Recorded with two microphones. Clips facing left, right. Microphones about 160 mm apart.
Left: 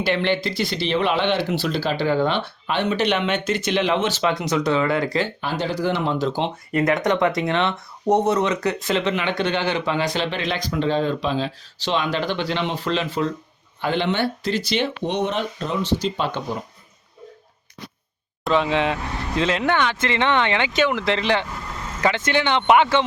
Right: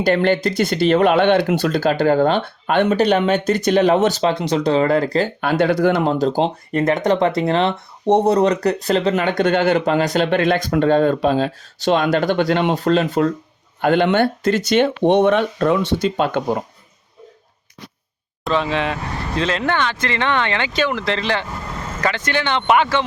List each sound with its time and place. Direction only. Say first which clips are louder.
0.0 s speech: right 5 dB; 45° right (ahead or behind)
5.4 s speech: right 8 dB; 60° right (ahead or behind)
6.1 s speech: right 5 dB; 35° right (ahead or behind); by 16.6 s 55° right (ahead or behind)
18.5 s speech: even; 15° left (ahead or behind)